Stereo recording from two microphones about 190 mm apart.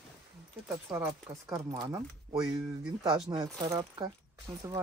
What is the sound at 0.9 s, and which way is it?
Speech, 20° right (ahead or behind).